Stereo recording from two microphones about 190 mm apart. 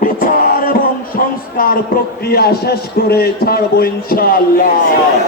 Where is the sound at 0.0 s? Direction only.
45° left (ahead or behind).